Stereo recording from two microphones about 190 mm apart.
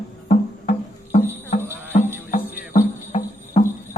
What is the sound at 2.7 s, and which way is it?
Music, 35° left (ahead or behind).